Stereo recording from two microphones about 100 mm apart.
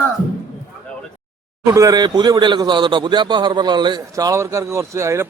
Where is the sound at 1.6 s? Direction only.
30° right (ahead or behind); by 4.0 s 50° right (ahead or behind).